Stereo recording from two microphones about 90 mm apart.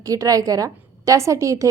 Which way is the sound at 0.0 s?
40° right (ahead or behind).